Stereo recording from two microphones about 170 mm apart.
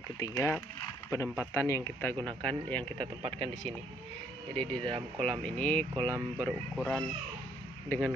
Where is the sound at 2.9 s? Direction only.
30° right (ahead or behind).